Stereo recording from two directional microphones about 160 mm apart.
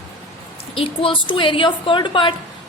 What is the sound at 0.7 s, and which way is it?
A woman's voice, 35° left (ahead or behind).